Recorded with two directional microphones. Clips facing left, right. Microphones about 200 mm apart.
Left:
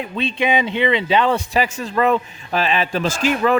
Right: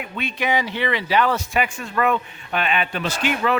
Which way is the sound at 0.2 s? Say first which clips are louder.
Left 4 dB; 25° left (ahead or behind).